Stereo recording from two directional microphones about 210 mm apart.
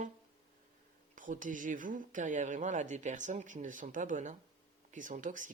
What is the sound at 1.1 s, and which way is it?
Speech, 40° right (ahead or behind).